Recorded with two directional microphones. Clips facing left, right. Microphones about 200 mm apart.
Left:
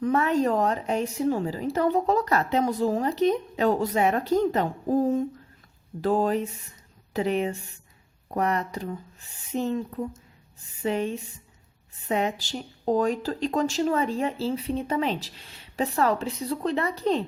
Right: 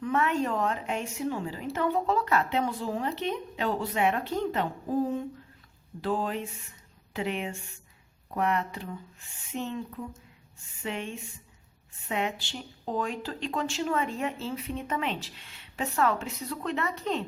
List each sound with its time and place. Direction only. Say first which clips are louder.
0.0 s a woman's voice: left 5 dB; 35° left (ahead or behind)